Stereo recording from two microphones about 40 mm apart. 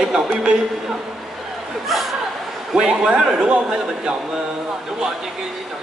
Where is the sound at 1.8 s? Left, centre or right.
Centre.